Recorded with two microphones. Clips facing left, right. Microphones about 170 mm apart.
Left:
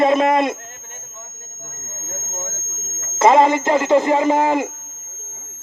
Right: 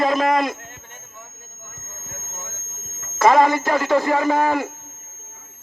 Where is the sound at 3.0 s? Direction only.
20° left (ahead or behind).